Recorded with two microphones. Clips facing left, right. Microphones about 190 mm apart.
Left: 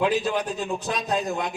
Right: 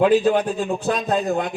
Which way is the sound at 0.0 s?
50° right (ahead or behind).